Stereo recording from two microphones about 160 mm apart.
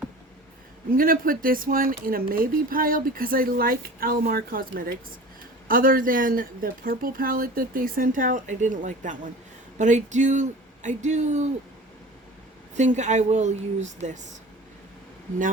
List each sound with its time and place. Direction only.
0.9 s speech: 65° right (ahead or behind); by 11.4 s 45° right (ahead or behind)
12.7 s speech: 50° right (ahead or behind)